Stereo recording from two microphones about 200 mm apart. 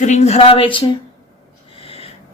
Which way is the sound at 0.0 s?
35° left (ahead or behind).